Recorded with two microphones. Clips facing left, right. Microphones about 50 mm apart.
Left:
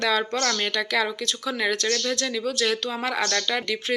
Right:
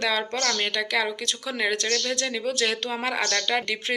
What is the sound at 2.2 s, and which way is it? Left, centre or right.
Speech, right.